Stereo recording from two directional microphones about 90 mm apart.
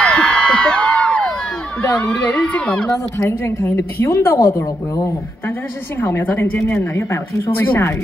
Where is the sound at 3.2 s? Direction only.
30° left (ahead or behind).